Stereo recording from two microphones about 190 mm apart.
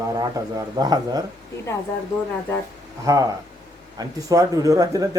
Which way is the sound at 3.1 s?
15° right (ahead or behind).